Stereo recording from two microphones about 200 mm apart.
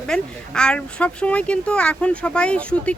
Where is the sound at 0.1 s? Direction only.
5° left (ahead or behind).